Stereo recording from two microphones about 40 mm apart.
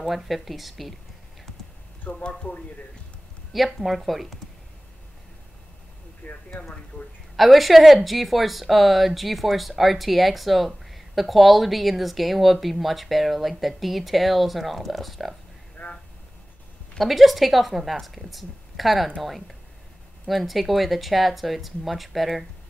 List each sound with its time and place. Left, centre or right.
0.0 s speech: centre
2.0 s speech: left
3.5 s speech: centre
6.2 s speech: left
7.3 s speech: centre
15.8 s a sound: left
17.0 s speech: centre